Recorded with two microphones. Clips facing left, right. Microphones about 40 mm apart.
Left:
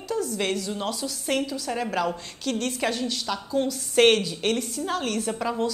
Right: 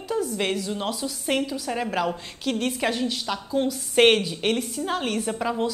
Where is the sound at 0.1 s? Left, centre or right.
Centre.